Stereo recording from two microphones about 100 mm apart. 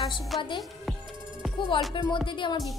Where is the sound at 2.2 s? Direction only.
55° left (ahead or behind).